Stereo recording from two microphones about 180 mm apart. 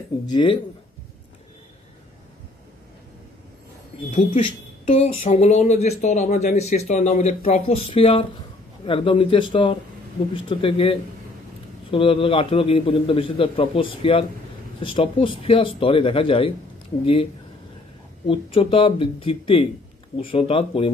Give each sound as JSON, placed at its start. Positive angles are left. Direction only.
{"t": 0.3, "sound": "a man's voice", "side_deg": 25}
{"t": 4.8, "sound": "a man's voice", "side_deg": 35}